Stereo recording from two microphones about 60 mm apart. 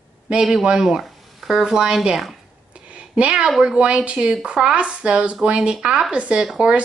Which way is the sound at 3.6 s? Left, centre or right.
Centre.